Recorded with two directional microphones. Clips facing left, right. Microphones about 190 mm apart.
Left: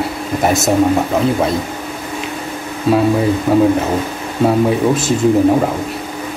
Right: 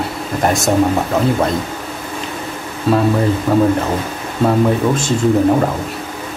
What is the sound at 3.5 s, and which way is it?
Speech, 5° left (ahead or behind).